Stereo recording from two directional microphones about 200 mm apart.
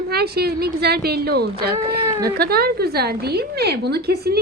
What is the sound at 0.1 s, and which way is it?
A woman's voice, 50° right (ahead or behind).